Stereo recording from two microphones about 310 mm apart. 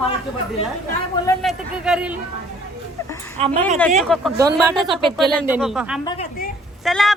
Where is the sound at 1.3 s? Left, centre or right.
Centre.